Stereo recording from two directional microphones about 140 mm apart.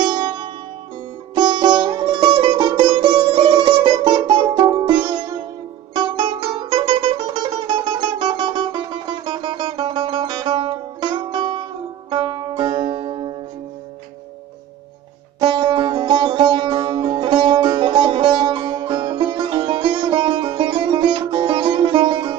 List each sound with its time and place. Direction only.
0.0 s music: 30° right (ahead or behind)
15.4 s music: 35° right (ahead or behind)